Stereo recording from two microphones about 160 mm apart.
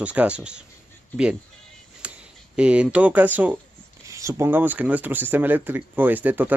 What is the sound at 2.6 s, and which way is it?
Speech, 5° right (ahead or behind).